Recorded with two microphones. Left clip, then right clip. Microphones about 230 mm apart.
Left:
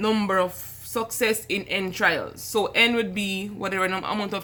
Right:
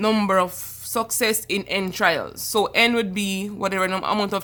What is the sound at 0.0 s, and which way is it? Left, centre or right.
Speech, right.